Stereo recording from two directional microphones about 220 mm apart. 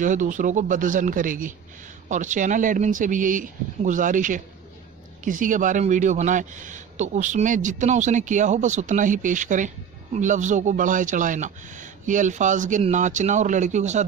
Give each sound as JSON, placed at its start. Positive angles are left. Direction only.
{"t": 0.0, "sound": "a man's voice", "side_deg": -35}